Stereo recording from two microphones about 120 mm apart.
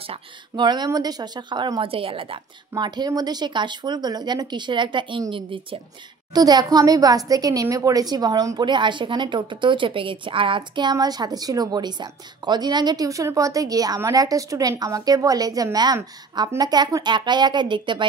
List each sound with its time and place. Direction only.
0.0 s speech: 50° right (ahead or behind)
0.7 s a woman's voice: 35° right (ahead or behind); by 2.4 s 50° right (ahead or behind)
2.7 s a woman's voice: 35° right (ahead or behind)
6.3 s a woman's voice: 35° right (ahead or behind)